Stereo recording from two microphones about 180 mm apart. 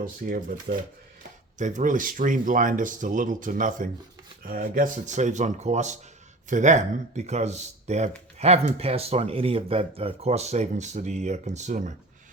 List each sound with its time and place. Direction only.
0.0 s speech: 50° right (ahead or behind)